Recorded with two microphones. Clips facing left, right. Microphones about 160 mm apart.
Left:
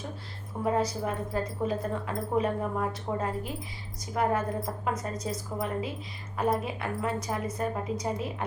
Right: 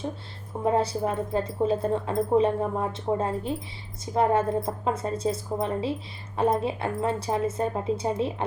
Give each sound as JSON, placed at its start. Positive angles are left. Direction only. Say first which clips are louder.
{"t": 0.6, "sound": "speech", "louder": "right 4 dB", "side_deg": -30}